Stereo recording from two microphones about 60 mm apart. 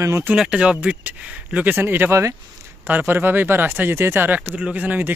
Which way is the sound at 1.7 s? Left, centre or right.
Right.